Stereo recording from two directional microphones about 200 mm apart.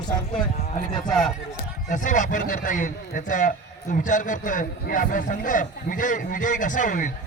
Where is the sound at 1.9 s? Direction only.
40° left (ahead or behind).